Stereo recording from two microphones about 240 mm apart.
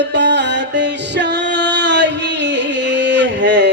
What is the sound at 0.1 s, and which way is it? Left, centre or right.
Music, right.